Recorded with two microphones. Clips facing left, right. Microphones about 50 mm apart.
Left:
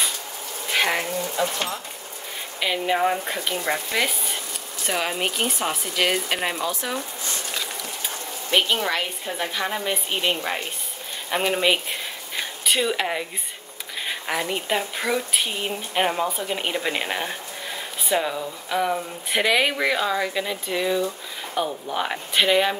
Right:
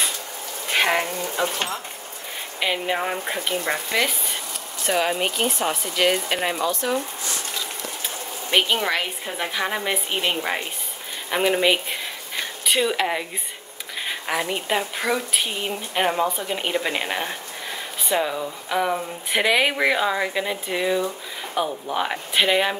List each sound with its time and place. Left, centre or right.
0.7 s a sound: centre
1.3 s speech: centre
8.5 s speech: centre